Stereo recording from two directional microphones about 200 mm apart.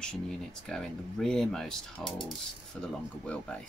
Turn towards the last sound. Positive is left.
turn(degrees=5)  # may be behind; listen again after turning